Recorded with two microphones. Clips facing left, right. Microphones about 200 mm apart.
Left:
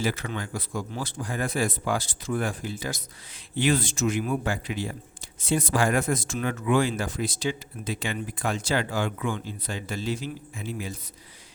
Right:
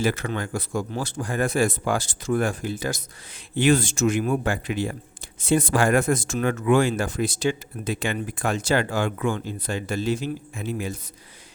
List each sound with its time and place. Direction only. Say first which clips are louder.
0.0 s speech: right 4 dB; 60° right (ahead or behind)
1.3 s speech: right 6 dB; 70° right (ahead or behind)
1.5 s speech: right 3 dB; 50° right (ahead or behind)
2.5 s speech: right 5 dB; 70° right (ahead or behind)
4.2 s speech: right 4 dB; 55° right (ahead or behind)